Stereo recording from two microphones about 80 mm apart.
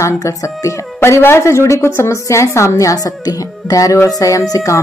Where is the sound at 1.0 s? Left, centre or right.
Left.